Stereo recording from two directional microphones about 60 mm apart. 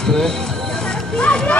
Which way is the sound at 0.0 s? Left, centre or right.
Centre.